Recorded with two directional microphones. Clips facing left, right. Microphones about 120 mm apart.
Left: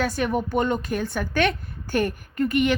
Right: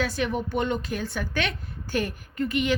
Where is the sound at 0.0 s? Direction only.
45° left (ahead or behind).